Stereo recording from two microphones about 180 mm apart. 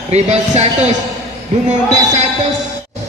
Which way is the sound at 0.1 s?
40° right (ahead or behind).